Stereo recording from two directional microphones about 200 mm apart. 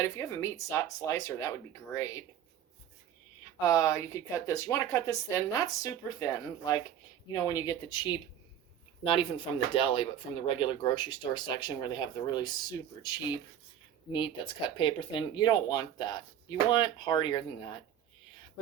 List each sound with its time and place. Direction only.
0.0 s speech: 15° left (ahead or behind)
3.6 s speech: 15° left (ahead or behind)